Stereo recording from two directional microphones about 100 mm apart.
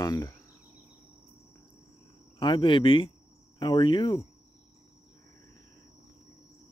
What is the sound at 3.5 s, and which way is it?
Cricket, 50° left (ahead or behind).